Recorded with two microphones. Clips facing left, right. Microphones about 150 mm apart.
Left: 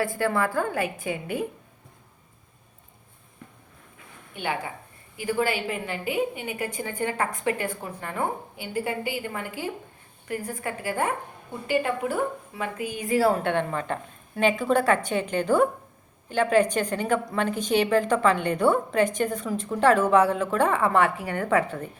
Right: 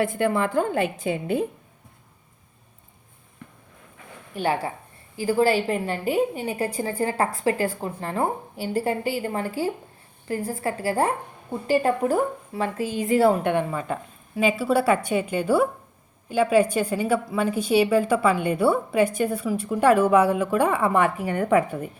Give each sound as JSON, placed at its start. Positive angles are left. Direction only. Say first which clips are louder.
{"t": 0.0, "sound": "a woman's voice", "louder": "right 2 dB", "side_deg": -20}
{"t": 4.4, "sound": "a woman's voice", "louder": "right 5 dB", "side_deg": -40}